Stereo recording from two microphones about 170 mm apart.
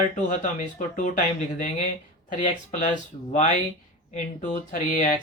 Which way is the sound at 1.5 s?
45° left (ahead or behind).